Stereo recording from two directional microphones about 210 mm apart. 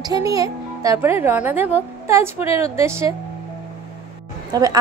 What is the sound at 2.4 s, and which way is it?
Speech, 25° left (ahead or behind).